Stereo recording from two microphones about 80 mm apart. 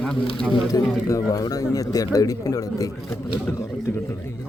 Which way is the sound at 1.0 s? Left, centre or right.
Left.